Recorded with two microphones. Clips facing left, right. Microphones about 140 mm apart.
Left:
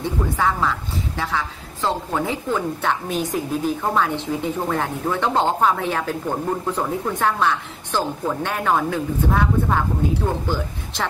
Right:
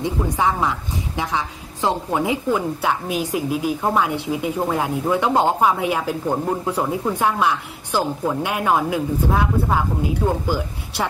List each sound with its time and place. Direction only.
0.0 s a woman's voice: 15° right (ahead or behind)